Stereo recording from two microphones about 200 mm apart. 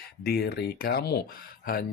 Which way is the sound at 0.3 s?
55° left (ahead or behind).